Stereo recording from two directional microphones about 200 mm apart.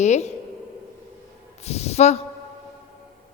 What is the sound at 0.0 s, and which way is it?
Speech, 35° left (ahead or behind).